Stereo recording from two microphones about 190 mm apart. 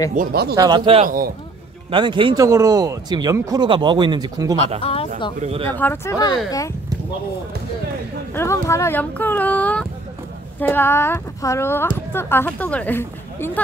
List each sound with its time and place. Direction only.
0.1 s speech: 50° right (ahead or behind)
0.6 s speech: 20° right (ahead or behind)
1.0 s a man's voice: 50° right (ahead or behind)
1.9 s speech: 25° right (ahead or behind)
5.4 s speech: 30° right (ahead or behind)
5.7 s speech: 10° left (ahead or behind)
8.3 s speech: 15° left (ahead or behind)